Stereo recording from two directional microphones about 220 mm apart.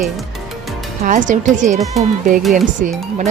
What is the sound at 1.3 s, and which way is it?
Speech, 35° right (ahead or behind).